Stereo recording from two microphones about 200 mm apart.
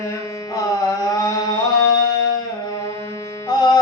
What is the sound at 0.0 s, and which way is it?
Music, 15° left (ahead or behind).